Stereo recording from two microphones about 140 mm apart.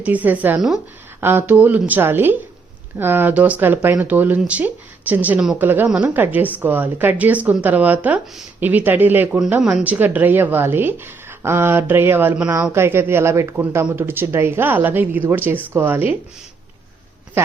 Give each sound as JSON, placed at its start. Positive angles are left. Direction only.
{"t": 0.0, "sound": "speech", "side_deg": -10}